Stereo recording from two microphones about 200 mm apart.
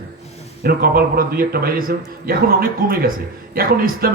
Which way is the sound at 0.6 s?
50° right (ahead or behind).